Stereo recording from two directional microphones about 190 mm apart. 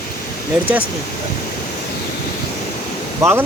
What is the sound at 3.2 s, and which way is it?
Speech, 15° right (ahead or behind).